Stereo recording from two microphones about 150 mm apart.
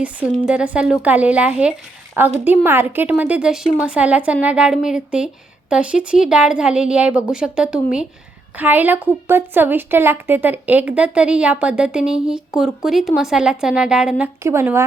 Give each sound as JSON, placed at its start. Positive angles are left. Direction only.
{"t": 0.0, "sound": "a woman's voice", "side_deg": -5}
{"t": 14.4, "sound": "a woman's voice", "side_deg": -15}